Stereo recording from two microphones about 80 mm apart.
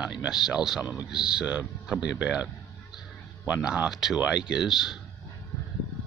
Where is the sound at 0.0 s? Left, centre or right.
Centre.